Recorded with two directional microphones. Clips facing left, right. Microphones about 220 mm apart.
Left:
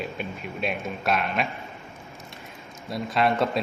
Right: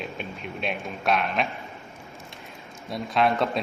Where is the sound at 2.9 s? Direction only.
Centre (ahead or behind).